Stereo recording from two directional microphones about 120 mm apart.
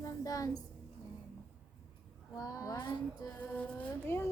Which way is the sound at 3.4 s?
10° left (ahead or behind).